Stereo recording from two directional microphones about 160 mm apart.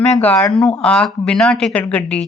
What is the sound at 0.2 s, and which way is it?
Speech, 10° left (ahead or behind).